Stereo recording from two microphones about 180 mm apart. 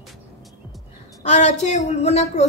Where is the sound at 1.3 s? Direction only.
40° left (ahead or behind).